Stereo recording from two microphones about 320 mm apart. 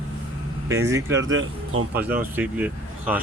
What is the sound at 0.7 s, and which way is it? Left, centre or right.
Speech, centre.